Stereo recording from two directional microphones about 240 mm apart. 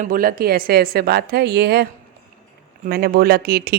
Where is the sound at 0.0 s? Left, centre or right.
Right.